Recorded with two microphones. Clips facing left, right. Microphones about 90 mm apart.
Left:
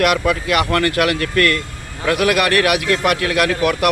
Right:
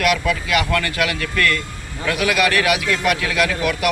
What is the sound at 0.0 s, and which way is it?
Speech, 55° left (ahead or behind).